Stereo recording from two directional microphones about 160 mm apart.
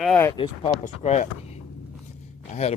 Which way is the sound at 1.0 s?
45° left (ahead or behind).